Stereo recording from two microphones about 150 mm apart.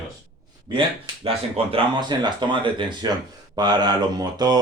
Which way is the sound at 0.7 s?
35° right (ahead or behind).